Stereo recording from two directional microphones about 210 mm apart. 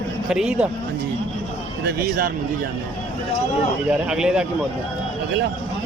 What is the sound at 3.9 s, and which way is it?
Speech, 5° right (ahead or behind).